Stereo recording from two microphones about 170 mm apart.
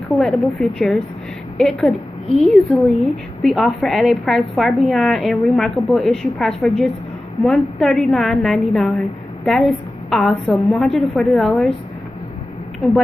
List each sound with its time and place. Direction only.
0.1 s a woman's voice: centre (ahead or behind)